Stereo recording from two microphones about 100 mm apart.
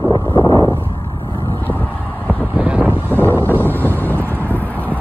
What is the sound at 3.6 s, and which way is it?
Vehicle, 20° left (ahead or behind).